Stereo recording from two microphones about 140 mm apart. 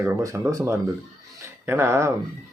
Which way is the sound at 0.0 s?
20° right (ahead or behind).